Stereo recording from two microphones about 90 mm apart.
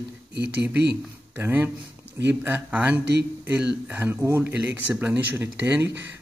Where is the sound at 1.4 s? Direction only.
25° right (ahead or behind).